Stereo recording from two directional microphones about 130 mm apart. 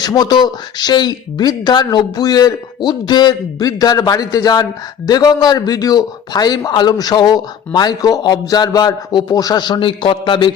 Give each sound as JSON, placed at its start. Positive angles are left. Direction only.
{"t": 0.0, "sound": "a man's voice", "side_deg": 30}